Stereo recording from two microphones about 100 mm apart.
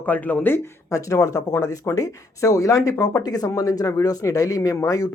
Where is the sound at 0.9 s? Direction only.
35° left (ahead or behind).